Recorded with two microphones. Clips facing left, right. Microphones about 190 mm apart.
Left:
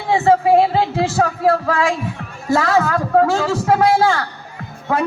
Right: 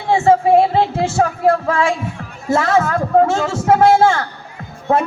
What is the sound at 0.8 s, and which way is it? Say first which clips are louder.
Music: right 1 dB; 25° right (ahead or behind).